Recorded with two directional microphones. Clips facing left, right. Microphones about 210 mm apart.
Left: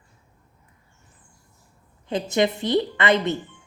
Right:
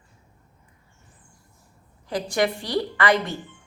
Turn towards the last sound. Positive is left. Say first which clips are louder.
# left 1 dB
turn(degrees=20)  # may be behind; listen again after turning